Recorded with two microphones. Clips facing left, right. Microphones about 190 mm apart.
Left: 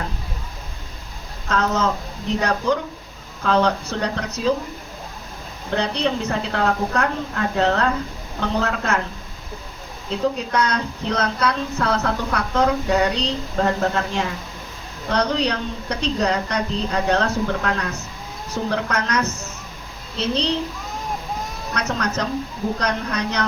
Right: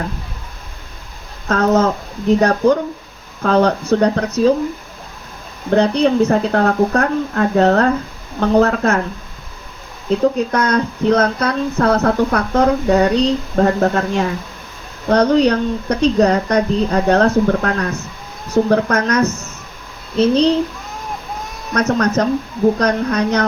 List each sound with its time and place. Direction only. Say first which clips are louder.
1.5 s a sound: right 7 dB; 50° right (ahead or behind)
2.4 s speech: right 5 dB; 50° right (ahead or behind)
5.7 s speech: right 9 dB; 50° right (ahead or behind)
10.1 s speech: right 7 dB; 50° right (ahead or behind)
21.7 s speech: right 9 dB; 50° right (ahead or behind)